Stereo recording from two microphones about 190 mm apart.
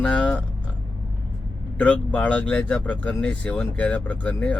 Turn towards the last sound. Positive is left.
turn(degrees=5)  # may be behind; listen again after turning